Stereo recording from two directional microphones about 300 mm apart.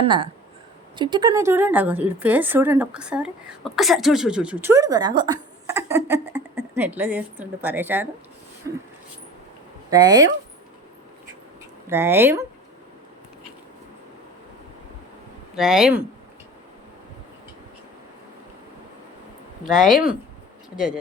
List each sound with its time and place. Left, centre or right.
0.0 s a woman's voice: centre
9.9 s a woman's voice: centre
11.9 s a woman's voice: centre
15.5 s speech: centre
19.8 s speech: centre